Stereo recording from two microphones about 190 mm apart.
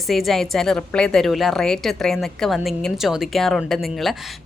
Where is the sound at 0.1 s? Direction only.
Centre (ahead or behind).